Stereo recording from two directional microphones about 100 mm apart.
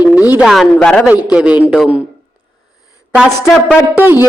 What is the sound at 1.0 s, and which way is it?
Speech, 10° right (ahead or behind).